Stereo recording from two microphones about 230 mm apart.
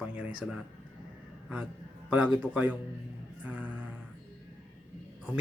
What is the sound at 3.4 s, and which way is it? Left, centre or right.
Music, centre.